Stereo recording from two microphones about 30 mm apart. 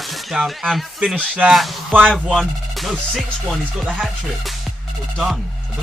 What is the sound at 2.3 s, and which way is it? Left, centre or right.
Speech, centre.